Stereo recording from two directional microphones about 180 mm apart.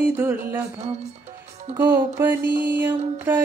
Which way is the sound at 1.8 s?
15° right (ahead or behind).